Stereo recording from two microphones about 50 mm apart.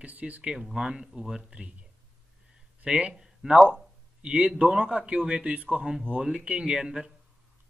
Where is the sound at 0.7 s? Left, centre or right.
Centre.